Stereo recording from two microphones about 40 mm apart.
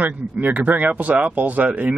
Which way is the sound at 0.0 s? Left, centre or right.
Right.